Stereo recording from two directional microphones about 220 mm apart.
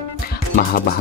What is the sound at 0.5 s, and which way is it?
Music, 40° left (ahead or behind).